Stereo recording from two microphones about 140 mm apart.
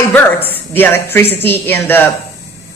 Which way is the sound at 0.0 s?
15° left (ahead or behind).